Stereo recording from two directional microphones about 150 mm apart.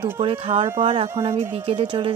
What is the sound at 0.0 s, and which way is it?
A woman's voice, 35° right (ahead or behind).